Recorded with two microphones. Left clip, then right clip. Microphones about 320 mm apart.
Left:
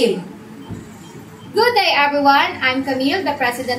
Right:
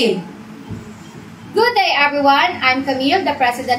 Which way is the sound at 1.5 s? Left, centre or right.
Left.